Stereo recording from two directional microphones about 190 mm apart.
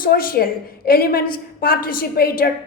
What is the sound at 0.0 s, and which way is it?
A woman's voice, 50° left (ahead or behind).